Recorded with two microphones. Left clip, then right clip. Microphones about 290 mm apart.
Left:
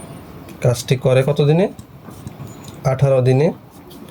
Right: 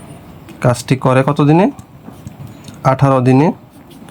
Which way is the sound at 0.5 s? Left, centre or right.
Centre.